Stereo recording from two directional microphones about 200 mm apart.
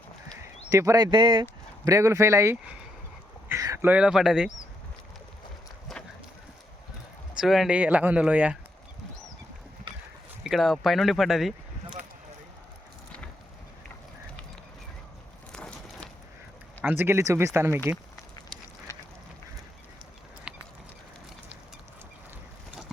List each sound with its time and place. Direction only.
0.7 s speech: 15° right (ahead or behind)
5.9 s clip-clop: centre (ahead or behind)
7.3 s speech: centre (ahead or behind)
10.4 s speech: centre (ahead or behind)
16.8 s speech: 10° right (ahead or behind)
20.5 s clip-clop: 5° right (ahead or behind)